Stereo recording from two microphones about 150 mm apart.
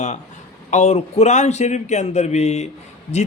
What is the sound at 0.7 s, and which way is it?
Speech, 45° left (ahead or behind).